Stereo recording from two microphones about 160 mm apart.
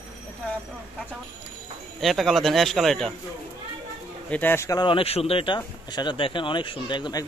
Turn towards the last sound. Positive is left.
turn(degrees=30)  # may be behind; listen again after turning